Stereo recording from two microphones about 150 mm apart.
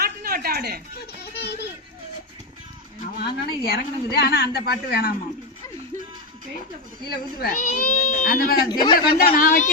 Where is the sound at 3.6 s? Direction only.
90° left.